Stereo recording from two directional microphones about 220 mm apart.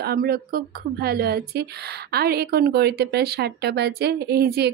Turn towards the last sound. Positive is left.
turn(degrees=-45)  # may be behind; listen again after turning